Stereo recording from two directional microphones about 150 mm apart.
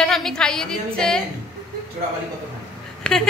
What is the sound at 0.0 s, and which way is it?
A woman's voice, 5° left (ahead or behind).